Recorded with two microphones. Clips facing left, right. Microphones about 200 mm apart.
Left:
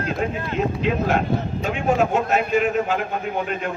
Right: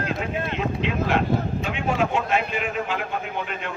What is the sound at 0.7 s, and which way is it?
A man's voice, 45° left (ahead or behind).